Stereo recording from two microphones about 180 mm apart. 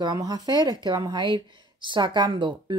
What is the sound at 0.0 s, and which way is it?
Speech, 20° right (ahead or behind).